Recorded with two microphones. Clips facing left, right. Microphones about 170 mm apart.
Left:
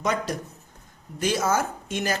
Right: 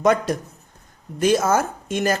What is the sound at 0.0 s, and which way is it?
A woman's voice, 55° right (ahead or behind).